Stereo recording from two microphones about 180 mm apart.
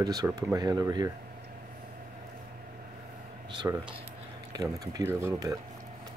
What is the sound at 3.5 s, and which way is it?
Speech, 25° right (ahead or behind).